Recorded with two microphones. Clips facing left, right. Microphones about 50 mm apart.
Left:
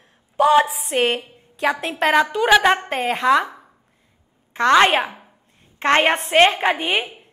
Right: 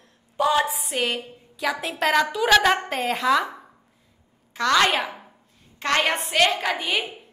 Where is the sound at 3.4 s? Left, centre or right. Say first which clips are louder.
Right 1 dB; centre.